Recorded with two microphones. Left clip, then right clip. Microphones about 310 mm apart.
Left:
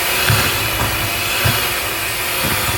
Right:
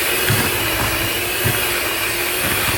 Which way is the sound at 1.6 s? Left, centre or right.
Centre.